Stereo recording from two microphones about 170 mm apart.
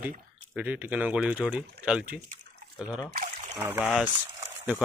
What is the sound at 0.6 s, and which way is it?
Speech, 10° right (ahead or behind).